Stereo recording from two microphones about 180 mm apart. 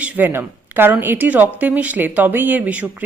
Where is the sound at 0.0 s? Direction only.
10° right (ahead or behind).